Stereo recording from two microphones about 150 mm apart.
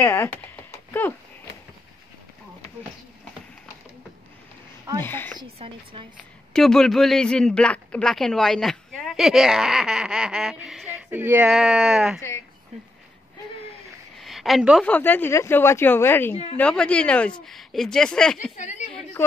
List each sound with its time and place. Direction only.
0.0 s speech: 20° left (ahead or behind)
5.0 s speech: 15° left (ahead or behind)
5.4 s speech: 35° right (ahead or behind)
6.5 s a man's voice: 5° left (ahead or behind)
14.1 s a sound: centre (ahead or behind)
14.9 s a man's voice: 10° left (ahead or behind)